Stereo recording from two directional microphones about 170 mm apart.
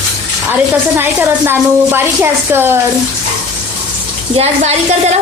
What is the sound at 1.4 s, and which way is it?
A woman's voice, 15° right (ahead or behind).